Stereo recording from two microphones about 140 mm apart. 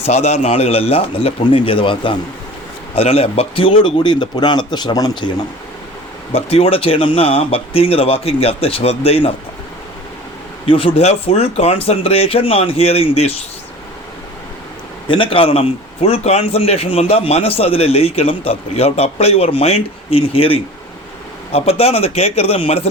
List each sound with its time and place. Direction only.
0.0 s a man's voice: 50° left (ahead or behind); by 5.3 s 30° left (ahead or behind)
6.3 s a man's voice: 45° left (ahead or behind)
10.7 s a man's voice: 40° left (ahead or behind)
15.0 s a man's voice: 35° left (ahead or behind)